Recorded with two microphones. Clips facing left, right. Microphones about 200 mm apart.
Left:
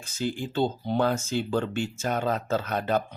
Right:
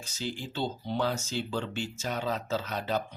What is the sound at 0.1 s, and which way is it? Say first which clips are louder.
Speech: left 7 dB; 50° left (ahead or behind).